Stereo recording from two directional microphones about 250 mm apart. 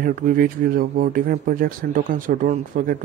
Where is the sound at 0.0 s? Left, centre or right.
Right.